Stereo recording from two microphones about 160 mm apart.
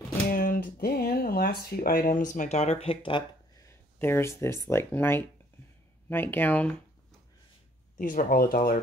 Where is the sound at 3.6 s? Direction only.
15° left (ahead or behind).